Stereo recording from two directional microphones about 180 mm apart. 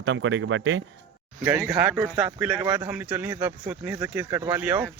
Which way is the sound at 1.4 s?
10° right (ahead or behind).